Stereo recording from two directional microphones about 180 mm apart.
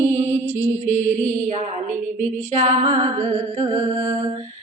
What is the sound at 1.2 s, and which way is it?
Music, 40° right (ahead or behind).